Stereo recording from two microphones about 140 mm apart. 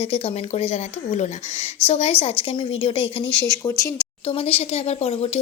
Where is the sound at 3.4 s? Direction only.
20° left (ahead or behind).